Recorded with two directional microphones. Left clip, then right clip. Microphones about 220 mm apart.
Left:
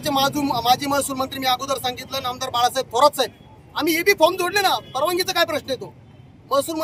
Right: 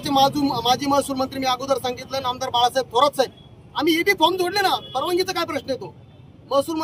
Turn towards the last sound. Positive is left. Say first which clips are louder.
# even
turn(degrees=10)  # may be behind; listen again after turning